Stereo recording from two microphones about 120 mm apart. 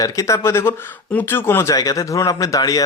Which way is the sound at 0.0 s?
25° left (ahead or behind).